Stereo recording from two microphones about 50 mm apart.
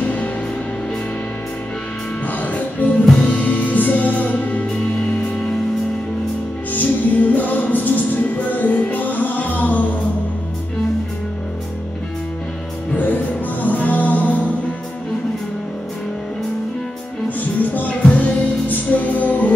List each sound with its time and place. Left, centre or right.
0.0 s music: left
2.2 s music: left
6.7 s music: left
12.9 s music: left
17.6 s music: left